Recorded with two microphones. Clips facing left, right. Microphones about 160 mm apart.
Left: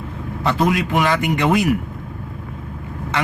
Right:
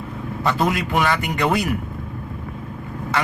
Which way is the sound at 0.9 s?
20° left (ahead or behind).